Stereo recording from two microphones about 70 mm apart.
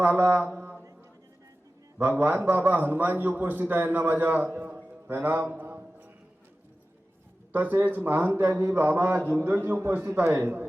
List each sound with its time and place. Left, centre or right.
0.0 s a man's voice: right
2.0 s a man's voice: right
5.0 s a sound: right
7.5 s a man's voice: right
9.6 s a man's voice: right
9.9 s a man's voice: right